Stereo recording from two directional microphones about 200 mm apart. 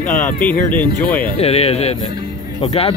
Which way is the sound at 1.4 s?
30° left (ahead or behind).